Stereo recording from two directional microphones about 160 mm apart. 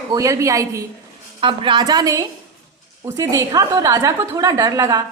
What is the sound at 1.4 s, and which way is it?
A woman's voice, 30° right (ahead or behind).